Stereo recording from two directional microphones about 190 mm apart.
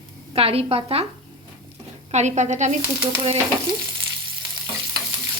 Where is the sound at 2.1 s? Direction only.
40° right (ahead or behind).